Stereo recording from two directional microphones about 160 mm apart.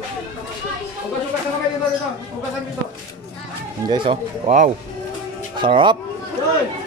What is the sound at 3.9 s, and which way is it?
Speech, 30° right (ahead or behind).